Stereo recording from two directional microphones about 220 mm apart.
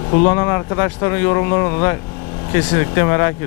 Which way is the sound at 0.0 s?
25° left (ahead or behind).